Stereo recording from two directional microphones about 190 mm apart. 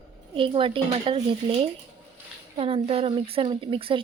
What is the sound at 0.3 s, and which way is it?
Speech, 25° right (ahead or behind).